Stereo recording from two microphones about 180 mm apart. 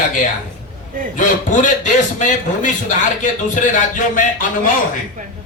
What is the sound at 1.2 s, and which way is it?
Speech, 45° left (ahead or behind).